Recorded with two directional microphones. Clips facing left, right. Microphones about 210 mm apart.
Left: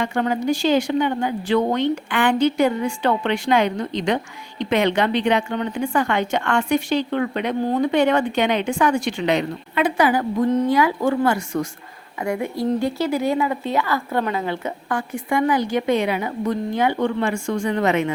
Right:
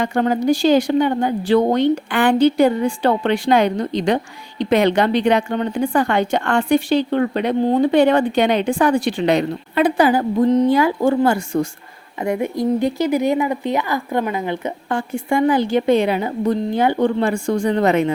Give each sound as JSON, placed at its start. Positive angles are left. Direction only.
{"t": 0.0, "sound": "a woman's voice", "side_deg": -40}
{"t": 7.6, "sound": "a woman's voice", "side_deg": -25}